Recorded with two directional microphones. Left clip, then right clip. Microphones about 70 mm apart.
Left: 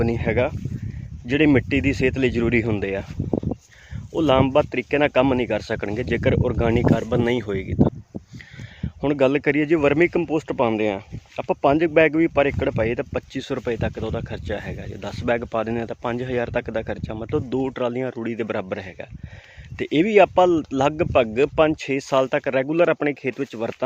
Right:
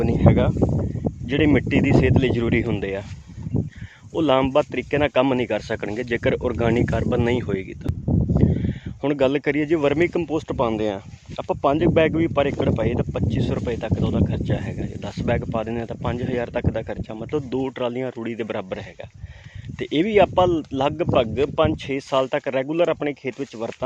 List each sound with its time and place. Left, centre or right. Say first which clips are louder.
0.0 s speech: right 1 dB; left
1.3 s speech: left 1 dB; left
4.1 s speech: left 1 dB; centre
8.4 s a sound: right 15 dB; centre
9.0 s speech: left 1 dB; centre
11.4 s speech: left 1 dB; left
15.4 s speech: left 2 dB; left
17.3 s speech: left 1 dB; left
22.7 s speech: left 2 dB; left